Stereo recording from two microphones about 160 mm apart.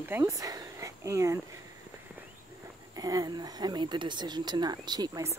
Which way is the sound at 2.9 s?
25° right (ahead or behind).